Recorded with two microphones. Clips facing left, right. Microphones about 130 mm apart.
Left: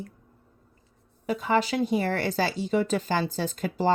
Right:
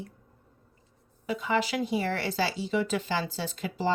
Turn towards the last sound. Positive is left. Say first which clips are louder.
# left 4 dB
turn(degrees=45)  # may be behind; listen again after turning